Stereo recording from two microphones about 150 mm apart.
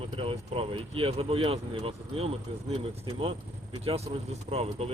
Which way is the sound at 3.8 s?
45° right (ahead or behind).